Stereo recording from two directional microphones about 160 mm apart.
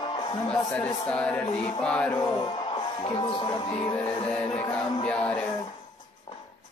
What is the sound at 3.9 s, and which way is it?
Speech, 10° left (ahead or behind).